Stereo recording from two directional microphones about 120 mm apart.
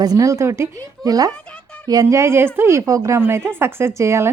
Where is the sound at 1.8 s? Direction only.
30° right (ahead or behind).